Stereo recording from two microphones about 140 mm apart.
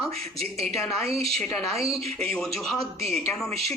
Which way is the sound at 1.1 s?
45° right (ahead or behind).